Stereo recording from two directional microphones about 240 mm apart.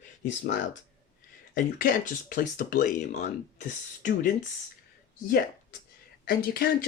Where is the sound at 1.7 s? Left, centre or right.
Left.